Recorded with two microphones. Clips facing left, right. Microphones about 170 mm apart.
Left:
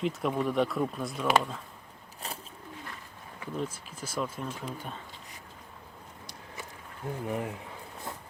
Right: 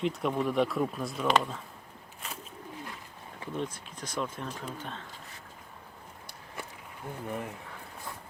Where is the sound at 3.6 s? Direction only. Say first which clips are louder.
Left 1 dB; 5° left (ahead or behind).